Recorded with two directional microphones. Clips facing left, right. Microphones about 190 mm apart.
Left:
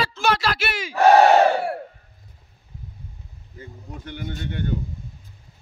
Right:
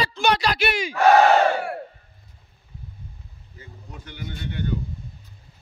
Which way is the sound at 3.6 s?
50° left (ahead or behind).